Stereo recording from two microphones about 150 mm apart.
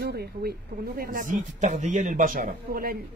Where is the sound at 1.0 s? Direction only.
65° right (ahead or behind).